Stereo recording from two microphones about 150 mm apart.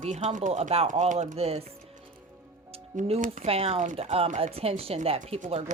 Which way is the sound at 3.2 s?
60° right (ahead or behind).